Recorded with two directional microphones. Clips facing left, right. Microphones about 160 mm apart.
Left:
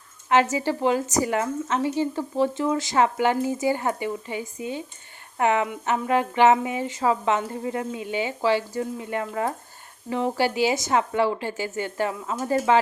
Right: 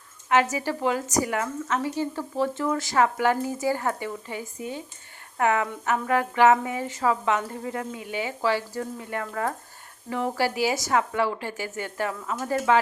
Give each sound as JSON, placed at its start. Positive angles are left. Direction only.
{"t": 0.3, "sound": "a woman's voice", "side_deg": 25}